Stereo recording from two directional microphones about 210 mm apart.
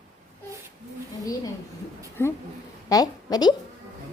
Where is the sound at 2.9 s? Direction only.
20° left (ahead or behind).